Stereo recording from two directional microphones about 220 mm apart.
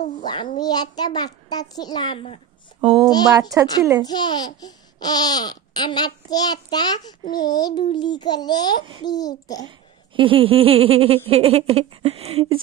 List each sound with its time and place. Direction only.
0.2 s a child's voice: 20° left (ahead or behind)
2.8 s speech: 25° right (ahead or behind)
4.0 s a child's voice: 20° left (ahead or behind)
9.7 s speech: 25° right (ahead or behind)